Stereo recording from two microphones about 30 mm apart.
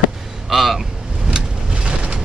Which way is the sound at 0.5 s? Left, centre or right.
Centre.